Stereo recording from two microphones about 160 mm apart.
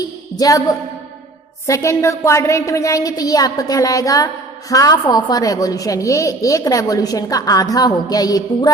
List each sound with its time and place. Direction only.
0.3 s a woman's voice: 25° left (ahead or behind)